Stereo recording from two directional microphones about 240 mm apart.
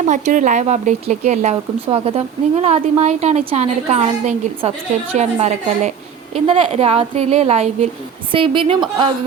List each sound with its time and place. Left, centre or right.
0.1 s speech: right